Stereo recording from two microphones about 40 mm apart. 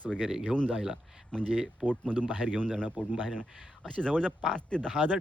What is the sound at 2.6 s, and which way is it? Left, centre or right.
Speech, centre.